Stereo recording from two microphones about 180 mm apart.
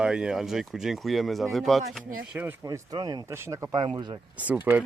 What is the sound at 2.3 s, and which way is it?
Speech, 15° right (ahead or behind).